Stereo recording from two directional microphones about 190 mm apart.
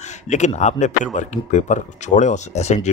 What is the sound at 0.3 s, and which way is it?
Speech, 40° left (ahead or behind).